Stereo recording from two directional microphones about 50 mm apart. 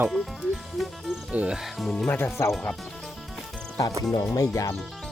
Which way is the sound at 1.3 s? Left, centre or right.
Right.